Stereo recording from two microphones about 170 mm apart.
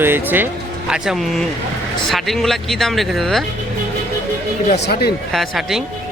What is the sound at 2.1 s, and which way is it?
Speech, centre (ahead or behind).